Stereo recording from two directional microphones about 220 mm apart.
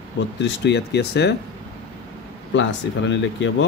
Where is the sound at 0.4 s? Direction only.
50° left (ahead or behind).